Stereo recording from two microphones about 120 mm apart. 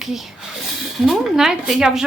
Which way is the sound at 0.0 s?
Centre (ahead or behind).